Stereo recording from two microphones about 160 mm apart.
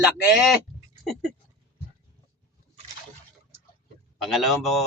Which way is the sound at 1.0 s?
Centre (ahead or behind).